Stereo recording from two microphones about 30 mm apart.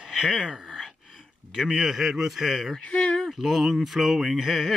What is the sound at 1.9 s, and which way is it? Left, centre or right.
Speech, centre.